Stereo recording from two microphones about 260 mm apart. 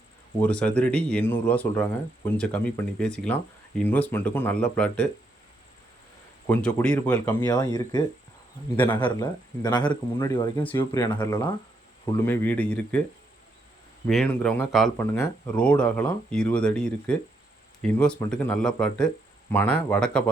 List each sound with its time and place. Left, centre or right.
0.3 s speech: centre
6.5 s speech: centre
14.1 s speech: centre